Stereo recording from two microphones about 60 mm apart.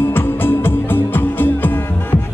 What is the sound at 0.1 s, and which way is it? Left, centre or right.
Music, left.